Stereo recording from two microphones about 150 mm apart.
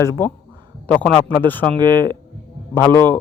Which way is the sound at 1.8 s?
30° right (ahead or behind).